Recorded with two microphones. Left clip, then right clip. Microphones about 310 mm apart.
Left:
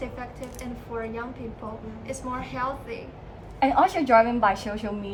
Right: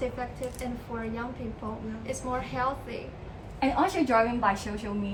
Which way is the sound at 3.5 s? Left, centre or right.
Left.